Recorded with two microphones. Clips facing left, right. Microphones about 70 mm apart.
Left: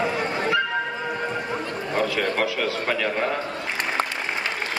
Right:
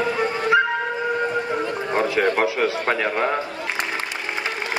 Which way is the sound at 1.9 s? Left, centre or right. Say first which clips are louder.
Right 4 dB; right.